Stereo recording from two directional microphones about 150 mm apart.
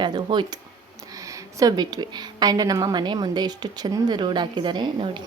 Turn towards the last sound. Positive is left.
turn(degrees=-30)  # may be behind; listen again after turning